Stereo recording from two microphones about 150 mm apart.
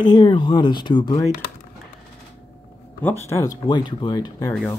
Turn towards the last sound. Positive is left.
turn(degrees=25)  # may be behind; listen again after turning